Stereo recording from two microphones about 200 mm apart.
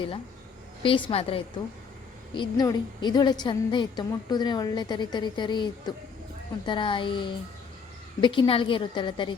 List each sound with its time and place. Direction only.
0.8 s a woman's voice: 25° left (ahead or behind)